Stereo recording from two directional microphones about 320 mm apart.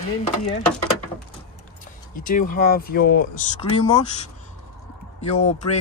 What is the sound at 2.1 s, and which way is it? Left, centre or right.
Speech, left.